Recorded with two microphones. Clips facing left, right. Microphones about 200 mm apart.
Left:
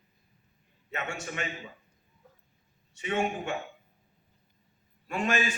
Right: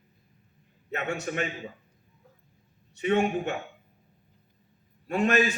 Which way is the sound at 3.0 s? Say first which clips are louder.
Right 5 dB; 45° right (ahead or behind).